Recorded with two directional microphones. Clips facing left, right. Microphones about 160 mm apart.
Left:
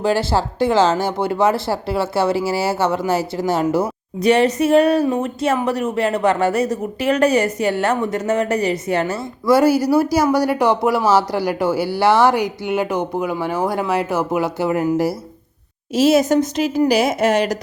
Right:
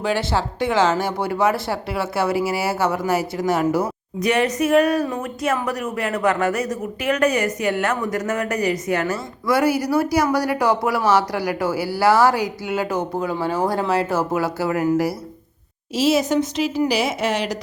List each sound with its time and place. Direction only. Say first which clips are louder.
0.0 s speech: left 4 dB; 35° left (ahead or behind)
16.0 s a woman's voice: left 4 dB; 50° left (ahead or behind)